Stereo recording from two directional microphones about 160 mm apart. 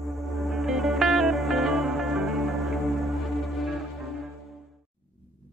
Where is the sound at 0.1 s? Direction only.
Centre (ahead or behind).